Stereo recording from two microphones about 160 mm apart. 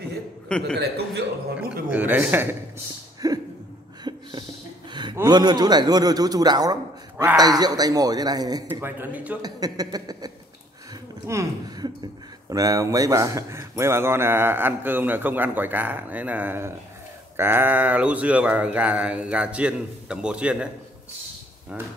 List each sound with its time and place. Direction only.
0.5 s a man's voice: 5° left (ahead or behind)
0.7 s a man's voice: 85° right
1.9 s a man's voice: 10° right (ahead or behind)
3.2 s a sound: 25° right (ahead or behind)
5.1 s a man's voice: 25° right (ahead or behind)
8.7 s a man's voice: 15° right (ahead or behind)
9.4 s a man's voice: 25° right (ahead or behind); by 20.7 s 5° right (ahead or behind)
21.7 s a man's voice: 10° right (ahead or behind)